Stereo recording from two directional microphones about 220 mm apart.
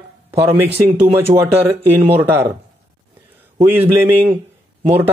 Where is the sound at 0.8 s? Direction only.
10° right (ahead or behind).